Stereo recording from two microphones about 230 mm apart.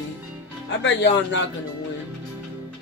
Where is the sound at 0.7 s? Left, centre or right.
Left.